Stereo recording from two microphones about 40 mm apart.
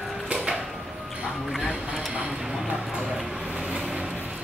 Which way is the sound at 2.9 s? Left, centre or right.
Centre.